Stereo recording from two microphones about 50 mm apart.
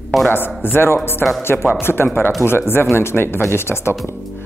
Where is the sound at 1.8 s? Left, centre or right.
Left.